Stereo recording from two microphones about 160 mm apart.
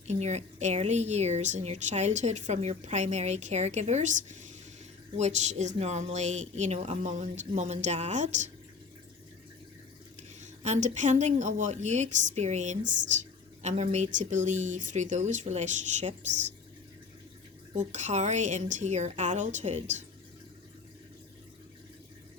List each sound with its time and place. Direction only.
0.1 s a woman's voice: 45° right (ahead or behind)
10.4 s a woman's voice: 50° right (ahead or behind)
17.7 s a woman's voice: 45° right (ahead or behind)